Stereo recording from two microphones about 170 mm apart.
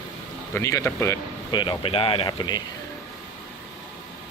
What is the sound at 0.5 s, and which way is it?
Speech, 20° left (ahead or behind).